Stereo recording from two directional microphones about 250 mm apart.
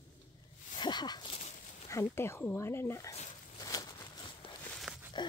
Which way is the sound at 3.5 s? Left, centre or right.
Centre.